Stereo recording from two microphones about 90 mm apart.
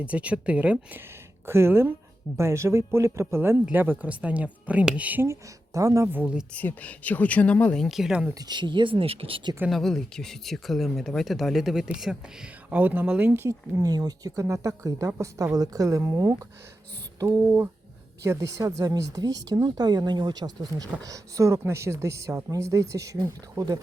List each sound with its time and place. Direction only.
0.0 s speech: 15° right (ahead or behind)
1.5 s speech: 30° right (ahead or behind)
5.2 s a woman's voice: 35° right (ahead or behind)
6.1 s speech: 20° right (ahead or behind)
6.5 s speech: 15° left (ahead or behind)
7.8 s speech: centre (ahead or behind)
8.4 s speech: 55° right (ahead or behind); by 9.5 s 85° right
9.6 s speech: 5° left (ahead or behind)
12.7 s speech: 20° right (ahead or behind)
13.5 s a woman's voice: 40° right (ahead or behind)
21.0 s a woman's voice: 40° right (ahead or behind)
23.1 s speech: 45° right (ahead or behind)